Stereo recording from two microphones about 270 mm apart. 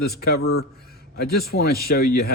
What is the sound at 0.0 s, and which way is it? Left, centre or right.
Speech, left.